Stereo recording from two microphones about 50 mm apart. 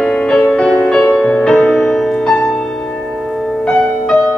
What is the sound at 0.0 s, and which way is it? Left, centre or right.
Music, centre.